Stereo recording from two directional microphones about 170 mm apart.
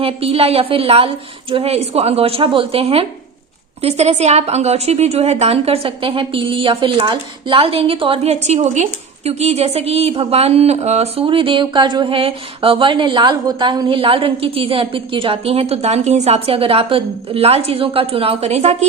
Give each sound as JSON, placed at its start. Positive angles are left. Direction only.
{"t": 0.0, "sound": "a woman's voice", "side_deg": -35}